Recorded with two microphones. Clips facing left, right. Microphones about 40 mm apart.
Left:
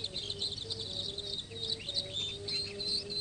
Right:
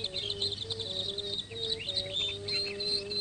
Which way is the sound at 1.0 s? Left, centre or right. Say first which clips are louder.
Right 4 dB; right.